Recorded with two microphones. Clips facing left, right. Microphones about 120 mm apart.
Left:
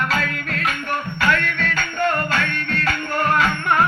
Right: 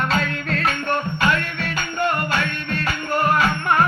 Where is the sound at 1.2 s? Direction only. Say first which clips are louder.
Left 4 dB; 15° right (ahead or behind).